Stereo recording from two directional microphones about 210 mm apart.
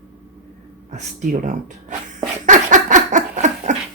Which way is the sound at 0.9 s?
35° right (ahead or behind).